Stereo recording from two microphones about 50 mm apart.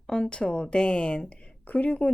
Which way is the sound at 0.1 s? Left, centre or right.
Centre.